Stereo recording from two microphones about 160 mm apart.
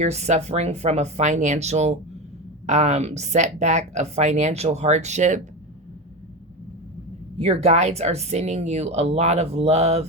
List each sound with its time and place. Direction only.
0.0 s speech: 45° right (ahead or behind)
7.3 s speech: 40° right (ahead or behind)